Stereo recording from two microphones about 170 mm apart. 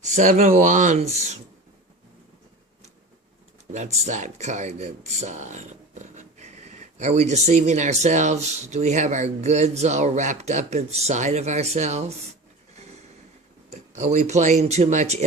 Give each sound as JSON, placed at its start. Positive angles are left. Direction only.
{"t": 0.0, "sound": "speech", "side_deg": -45}
{"t": 3.7, "sound": "speech", "side_deg": -40}
{"t": 12.7, "sound": "a sound", "side_deg": -40}
{"t": 13.7, "sound": "speech", "side_deg": -45}